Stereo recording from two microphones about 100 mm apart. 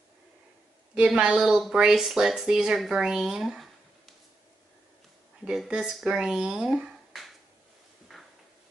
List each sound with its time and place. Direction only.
0.9 s speech: 10° right (ahead or behind)
5.4 s speech: 5° right (ahead or behind)